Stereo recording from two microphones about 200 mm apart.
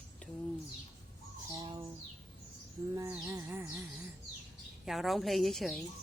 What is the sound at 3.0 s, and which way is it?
Music, 15° right (ahead or behind).